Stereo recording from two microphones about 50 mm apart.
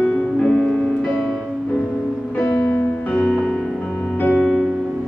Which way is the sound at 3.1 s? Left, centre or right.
Left.